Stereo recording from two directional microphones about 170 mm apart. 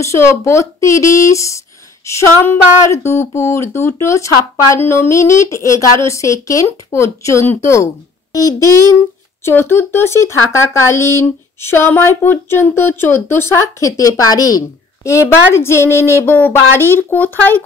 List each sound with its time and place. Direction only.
0.0 s speech: 15° left (ahead or behind)